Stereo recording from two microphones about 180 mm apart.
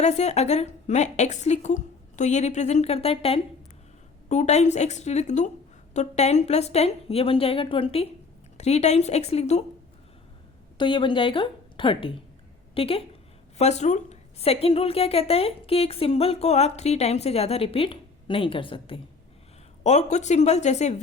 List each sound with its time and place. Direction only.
0.0 s a woman's voice: 40° left (ahead or behind)
10.8 s a woman's voice: 25° left (ahead or behind)
19.8 s a woman's voice: 40° left (ahead or behind)